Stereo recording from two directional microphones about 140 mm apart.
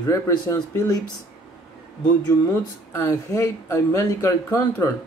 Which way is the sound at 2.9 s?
25° left (ahead or behind).